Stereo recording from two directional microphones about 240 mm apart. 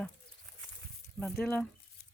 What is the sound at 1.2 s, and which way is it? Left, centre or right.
Speech, centre.